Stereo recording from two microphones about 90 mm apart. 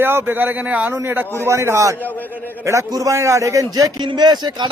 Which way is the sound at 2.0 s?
20° left (ahead or behind).